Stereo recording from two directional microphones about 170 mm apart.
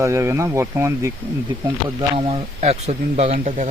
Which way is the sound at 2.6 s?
40° right (ahead or behind).